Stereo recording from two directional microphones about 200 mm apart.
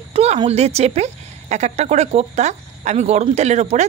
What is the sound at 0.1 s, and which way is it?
Speech, 30° right (ahead or behind).